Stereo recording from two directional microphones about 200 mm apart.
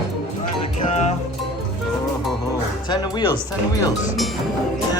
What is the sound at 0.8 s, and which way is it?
Music, 35° left (ahead or behind).